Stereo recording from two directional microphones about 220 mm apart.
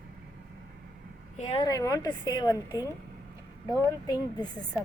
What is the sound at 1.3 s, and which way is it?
Speech, 30° left (ahead or behind).